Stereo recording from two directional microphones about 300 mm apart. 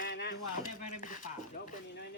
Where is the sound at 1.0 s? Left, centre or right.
Left.